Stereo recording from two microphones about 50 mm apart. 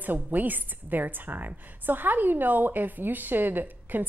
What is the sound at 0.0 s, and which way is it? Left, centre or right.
A woman's voice, right.